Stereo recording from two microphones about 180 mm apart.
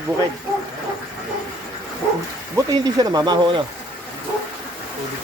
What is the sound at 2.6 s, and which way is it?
Speech, 20° right (ahead or behind).